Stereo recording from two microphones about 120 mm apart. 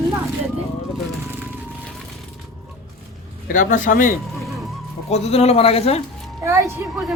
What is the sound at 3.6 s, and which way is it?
Speech, 90° left.